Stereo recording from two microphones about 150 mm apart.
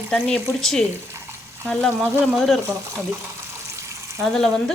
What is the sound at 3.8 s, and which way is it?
Water, 20° right (ahead or behind).